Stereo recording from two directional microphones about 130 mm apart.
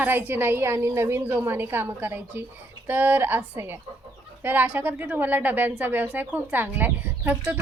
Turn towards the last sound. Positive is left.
turn(degrees=-15)  # may be behind; listen again after turning